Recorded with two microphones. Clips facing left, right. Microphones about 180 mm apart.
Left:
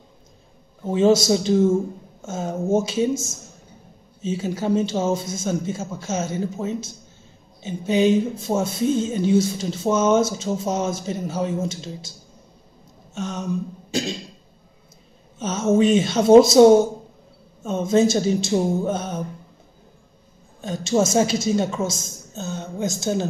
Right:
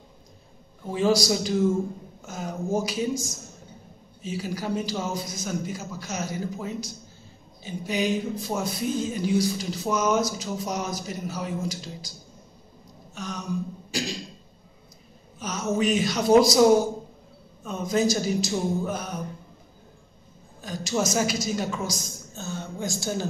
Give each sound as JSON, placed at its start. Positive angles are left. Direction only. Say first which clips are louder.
{"t": 0.8, "sound": "speech", "louder": "left 6 dB", "side_deg": 25}
{"t": 13.1, "sound": "a sound", "louder": "left 6 dB", "side_deg": 25}
{"t": 13.9, "sound": "speech", "louder": "left 5 dB", "side_deg": 25}
{"t": 15.3, "sound": "speech", "louder": "left 8 dB", "side_deg": 25}
{"t": 20.6, "sound": "speech", "louder": "left 6 dB", "side_deg": 25}